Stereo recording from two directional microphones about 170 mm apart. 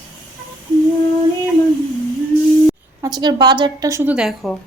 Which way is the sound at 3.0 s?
25° right (ahead or behind).